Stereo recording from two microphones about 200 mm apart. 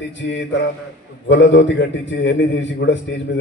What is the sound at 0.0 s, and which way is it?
A man's voice, 60° left (ahead or behind).